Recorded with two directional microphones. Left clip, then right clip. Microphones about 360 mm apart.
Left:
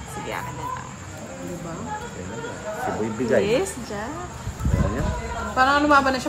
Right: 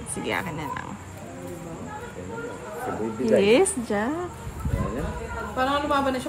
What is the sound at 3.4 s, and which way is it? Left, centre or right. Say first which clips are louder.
Speech: right 3 dB; right.